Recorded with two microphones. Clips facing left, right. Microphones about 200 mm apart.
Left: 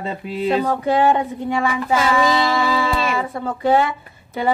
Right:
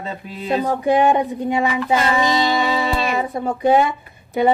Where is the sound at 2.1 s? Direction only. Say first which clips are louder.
Even; 20° right (ahead or behind).